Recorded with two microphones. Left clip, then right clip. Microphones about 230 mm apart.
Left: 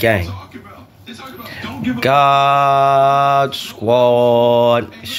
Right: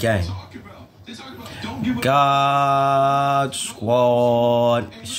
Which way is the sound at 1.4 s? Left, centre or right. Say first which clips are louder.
Left 3 dB; centre.